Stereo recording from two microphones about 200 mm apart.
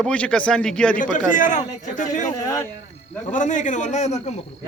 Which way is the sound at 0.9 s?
40° left (ahead or behind).